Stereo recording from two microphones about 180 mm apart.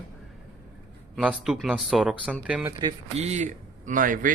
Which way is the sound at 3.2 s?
40° right (ahead or behind).